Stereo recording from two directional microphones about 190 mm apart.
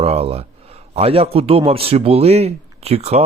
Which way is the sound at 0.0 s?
30° right (ahead or behind).